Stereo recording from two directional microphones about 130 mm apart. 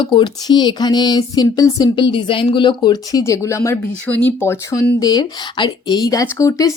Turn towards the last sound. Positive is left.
turn(degrees=25)  # may be behind; listen again after turning